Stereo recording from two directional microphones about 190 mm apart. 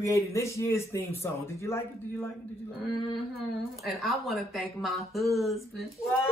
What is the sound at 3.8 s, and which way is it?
Speech, centre (ahead or behind).